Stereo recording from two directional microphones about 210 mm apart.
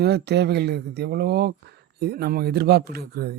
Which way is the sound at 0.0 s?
50° right (ahead or behind).